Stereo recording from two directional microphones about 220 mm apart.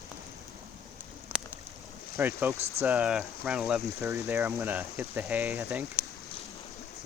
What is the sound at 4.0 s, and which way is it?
Speech, 15° right (ahead or behind).